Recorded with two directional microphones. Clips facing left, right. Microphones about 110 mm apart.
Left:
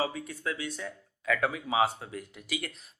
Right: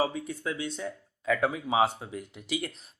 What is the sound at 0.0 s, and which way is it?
Speech, 20° right (ahead or behind).